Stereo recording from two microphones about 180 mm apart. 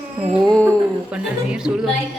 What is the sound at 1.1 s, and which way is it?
Speech, 5° right (ahead or behind).